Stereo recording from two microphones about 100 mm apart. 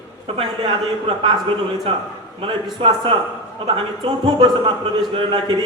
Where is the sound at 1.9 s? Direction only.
70° right (ahead or behind).